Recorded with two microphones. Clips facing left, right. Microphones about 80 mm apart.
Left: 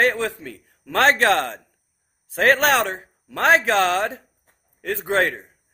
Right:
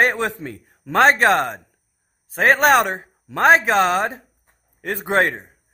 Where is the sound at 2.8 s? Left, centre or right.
Right.